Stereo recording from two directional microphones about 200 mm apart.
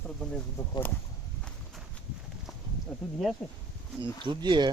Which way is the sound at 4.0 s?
25° right (ahead or behind).